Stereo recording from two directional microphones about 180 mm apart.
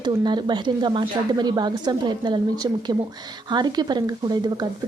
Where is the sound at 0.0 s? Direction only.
25° right (ahead or behind).